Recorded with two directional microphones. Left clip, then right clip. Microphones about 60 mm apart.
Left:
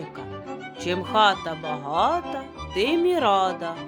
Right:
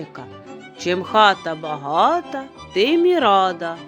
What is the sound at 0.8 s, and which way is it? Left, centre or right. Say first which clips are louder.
Speech: right 5 dB; right.